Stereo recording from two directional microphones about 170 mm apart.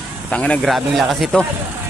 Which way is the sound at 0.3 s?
5° left (ahead or behind).